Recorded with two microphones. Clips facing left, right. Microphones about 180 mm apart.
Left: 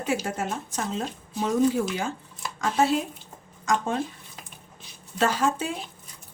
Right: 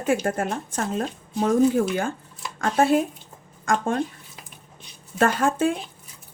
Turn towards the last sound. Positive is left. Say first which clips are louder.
# right 4 dB
turn(degrees=-55)  # may be behind; listen again after turning